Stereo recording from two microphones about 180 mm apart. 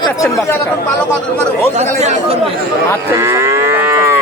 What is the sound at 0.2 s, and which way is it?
Speech, 15° left (ahead or behind).